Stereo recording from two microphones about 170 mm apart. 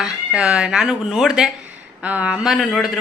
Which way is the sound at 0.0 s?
5° right (ahead or behind).